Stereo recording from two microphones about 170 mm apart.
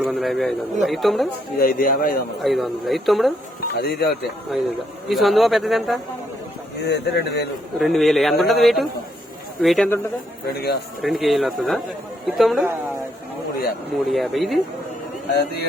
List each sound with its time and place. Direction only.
0.0 s speech: 5° right (ahead or behind)
1.5 s speech: 55° left (ahead or behind)
2.4 s speech: centre (ahead or behind)
3.7 s speech: 70° left (ahead or behind)
4.5 s speech: centre (ahead or behind)
6.8 s speech: 85° left
7.8 s speech: centre (ahead or behind)
10.4 s speech: 70° left (ahead or behind)
11.0 s speech: centre (ahead or behind)
14.1 s speech: centre (ahead or behind)